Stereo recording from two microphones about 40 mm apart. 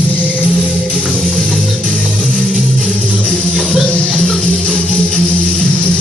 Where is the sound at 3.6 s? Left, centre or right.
Centre.